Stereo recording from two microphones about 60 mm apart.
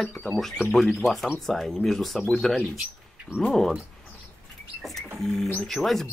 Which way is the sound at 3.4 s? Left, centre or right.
Centre.